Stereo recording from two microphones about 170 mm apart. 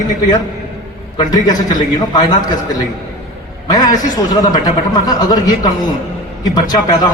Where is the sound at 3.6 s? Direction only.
25° left (ahead or behind).